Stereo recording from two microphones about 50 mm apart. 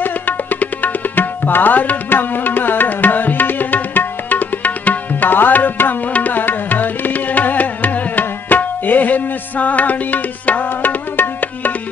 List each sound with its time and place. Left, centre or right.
0.0 s tabla: left
6.1 s music: left